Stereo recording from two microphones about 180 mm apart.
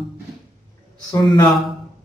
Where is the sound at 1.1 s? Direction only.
20° left (ahead or behind).